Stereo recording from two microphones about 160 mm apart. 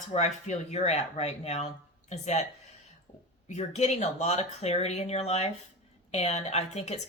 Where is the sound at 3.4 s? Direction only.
45° left (ahead or behind).